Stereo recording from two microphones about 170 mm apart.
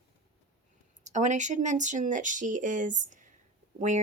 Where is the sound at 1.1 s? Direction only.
45° right (ahead or behind).